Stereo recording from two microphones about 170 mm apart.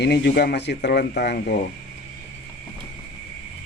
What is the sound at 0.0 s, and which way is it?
Speech, 85° left.